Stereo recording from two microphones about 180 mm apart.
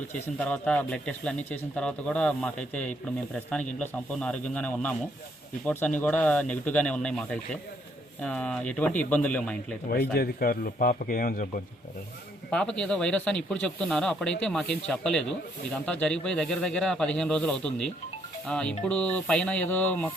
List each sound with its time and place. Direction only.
0.3 s a man's voice: 5° left (ahead or behind)
10.2 s speech: 55° left (ahead or behind)
12.5 s a man's voice: 5° left (ahead or behind)